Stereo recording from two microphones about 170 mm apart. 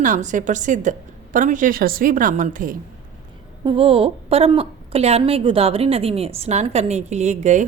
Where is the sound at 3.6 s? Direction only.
35° right (ahead or behind).